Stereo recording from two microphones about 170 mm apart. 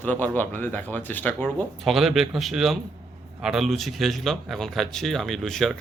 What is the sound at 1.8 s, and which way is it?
Speech, centre (ahead or behind).